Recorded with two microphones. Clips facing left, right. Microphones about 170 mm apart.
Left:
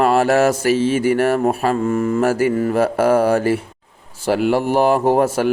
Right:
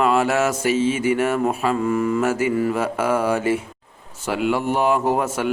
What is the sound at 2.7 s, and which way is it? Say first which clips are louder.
A man's voice: left 6 dB; 35° left (ahead or behind).